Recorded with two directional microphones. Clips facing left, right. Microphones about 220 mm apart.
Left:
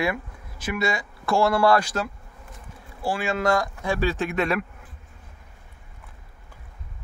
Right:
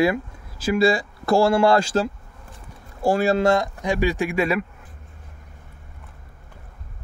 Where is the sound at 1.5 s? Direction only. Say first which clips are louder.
Right 3 dB; 25° right (ahead or behind).